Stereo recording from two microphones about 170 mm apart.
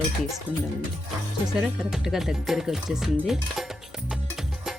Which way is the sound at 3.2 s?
Centre (ahead or behind).